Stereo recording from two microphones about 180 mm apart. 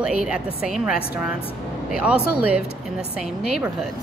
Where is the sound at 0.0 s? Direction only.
5° right (ahead or behind).